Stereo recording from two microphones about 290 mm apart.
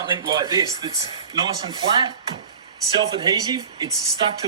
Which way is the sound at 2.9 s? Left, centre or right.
Centre.